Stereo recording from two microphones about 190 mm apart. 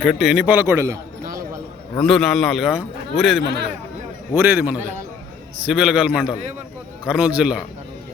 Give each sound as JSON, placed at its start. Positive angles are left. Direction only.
{"t": 0.0, "sound": "a man's voice", "side_deg": 0}
{"t": 1.2, "sound": "a sound", "side_deg": -50}
{"t": 2.0, "sound": "a man's voice", "side_deg": 0}